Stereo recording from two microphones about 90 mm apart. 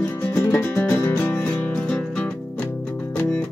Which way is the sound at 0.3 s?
25° left (ahead or behind).